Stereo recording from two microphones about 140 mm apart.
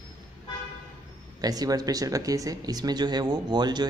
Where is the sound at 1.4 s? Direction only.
25° right (ahead or behind).